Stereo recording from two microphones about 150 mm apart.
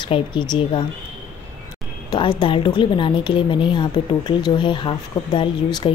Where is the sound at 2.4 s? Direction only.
30° left (ahead or behind).